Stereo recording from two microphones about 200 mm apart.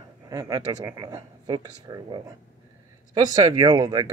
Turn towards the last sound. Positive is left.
turn(degrees=-20)  # may be behind; listen again after turning